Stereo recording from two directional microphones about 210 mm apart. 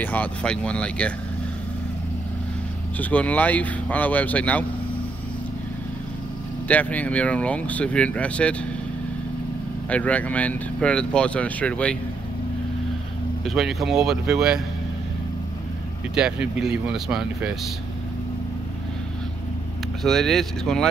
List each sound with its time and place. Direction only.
0.0 s speech: 5° left (ahead or behind)
3.0 s speech: 5° left (ahead or behind)
6.7 s speech: 5° left (ahead or behind)
9.8 s speech: 5° left (ahead or behind)
13.5 s speech: centre (ahead or behind)
16.2 s speech: 5° right (ahead or behind)
20.0 s speech: centre (ahead or behind)